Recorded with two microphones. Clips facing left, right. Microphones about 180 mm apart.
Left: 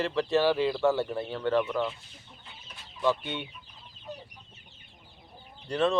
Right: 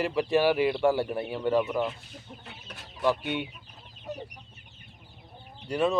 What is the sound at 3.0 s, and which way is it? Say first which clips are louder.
Speech: right 1 dB; 15° right (ahead or behind).